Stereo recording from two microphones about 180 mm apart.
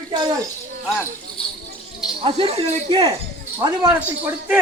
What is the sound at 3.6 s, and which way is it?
Speech, 15° right (ahead or behind).